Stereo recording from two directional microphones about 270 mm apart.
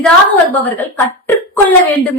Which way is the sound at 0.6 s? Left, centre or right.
Centre.